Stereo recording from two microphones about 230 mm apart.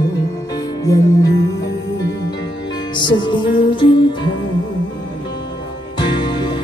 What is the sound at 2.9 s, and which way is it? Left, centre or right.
Music, centre.